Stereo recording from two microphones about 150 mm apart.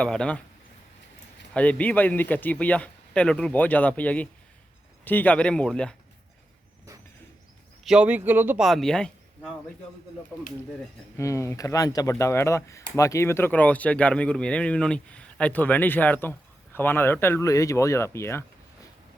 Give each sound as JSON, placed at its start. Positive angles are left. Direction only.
{"t": 0.0, "sound": "speech", "side_deg": 5}
{"t": 1.5, "sound": "speech", "side_deg": 10}
{"t": 7.9, "sound": "speech", "side_deg": -10}
{"t": 8.6, "sound": "speech", "side_deg": 0}
{"t": 11.2, "sound": "speech", "side_deg": 20}